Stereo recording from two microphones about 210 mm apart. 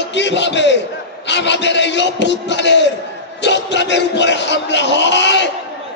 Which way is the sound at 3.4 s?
55° left (ahead or behind).